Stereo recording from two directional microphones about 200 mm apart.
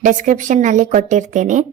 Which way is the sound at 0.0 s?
40° right (ahead or behind).